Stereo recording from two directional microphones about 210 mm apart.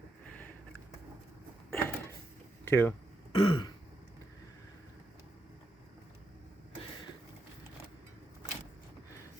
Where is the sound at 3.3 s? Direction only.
25° left (ahead or behind).